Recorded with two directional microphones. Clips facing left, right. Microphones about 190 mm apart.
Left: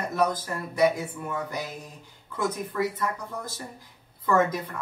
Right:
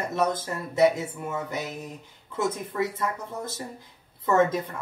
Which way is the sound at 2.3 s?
25° right (ahead or behind).